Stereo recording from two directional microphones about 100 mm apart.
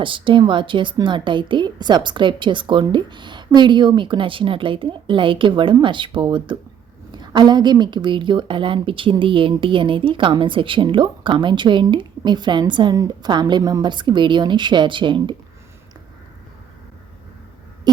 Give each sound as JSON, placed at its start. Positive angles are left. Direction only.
{"t": 0.0, "sound": "a woman's voice", "side_deg": -60}
{"t": 13.6, "sound": "a woman's voice", "side_deg": -35}
{"t": 13.8, "sound": "a woman's voice", "side_deg": -50}